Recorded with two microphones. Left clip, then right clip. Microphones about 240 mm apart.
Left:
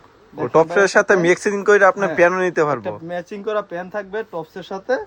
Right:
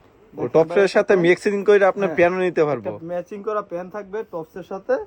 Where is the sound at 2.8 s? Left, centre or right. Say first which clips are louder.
Left 1 dB; left.